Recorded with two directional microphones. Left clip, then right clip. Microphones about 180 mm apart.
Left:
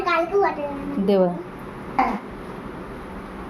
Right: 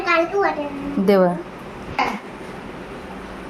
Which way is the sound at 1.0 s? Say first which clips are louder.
Right 3 dB; 15° right (ahead or behind).